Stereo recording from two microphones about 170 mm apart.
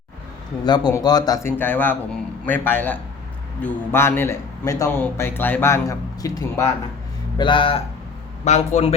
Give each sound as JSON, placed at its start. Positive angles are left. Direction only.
{"t": 0.6, "sound": "speech", "side_deg": 25}
{"t": 1.5, "sound": "speech", "side_deg": 10}
{"t": 7.3, "sound": "speech", "side_deg": 30}
{"t": 8.4, "sound": "a man's voice", "side_deg": 40}